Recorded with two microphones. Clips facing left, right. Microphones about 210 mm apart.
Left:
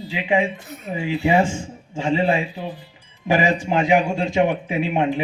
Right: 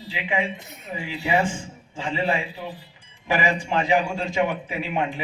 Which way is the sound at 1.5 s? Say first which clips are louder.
Left 5 dB; 45° left (ahead or behind).